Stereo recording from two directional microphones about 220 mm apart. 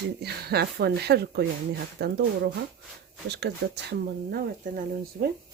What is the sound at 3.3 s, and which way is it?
Speech, 50° right (ahead or behind).